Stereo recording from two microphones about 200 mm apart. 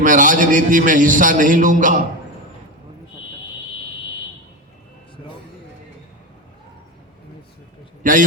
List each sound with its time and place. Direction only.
0.0 s a man's voice: 40° right (ahead or behind)
8.0 s a man's voice: 40° right (ahead or behind)